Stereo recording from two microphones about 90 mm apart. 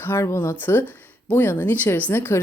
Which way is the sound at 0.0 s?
30° left (ahead or behind).